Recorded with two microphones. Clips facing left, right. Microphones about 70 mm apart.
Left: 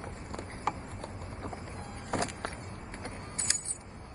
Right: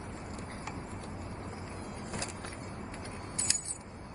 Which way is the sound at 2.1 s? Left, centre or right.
Left.